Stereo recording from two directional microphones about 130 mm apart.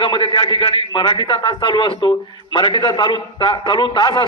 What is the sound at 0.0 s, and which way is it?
A man's voice, 40° left (ahead or behind).